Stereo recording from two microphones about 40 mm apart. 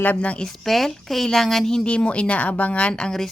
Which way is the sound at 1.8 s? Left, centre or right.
Left.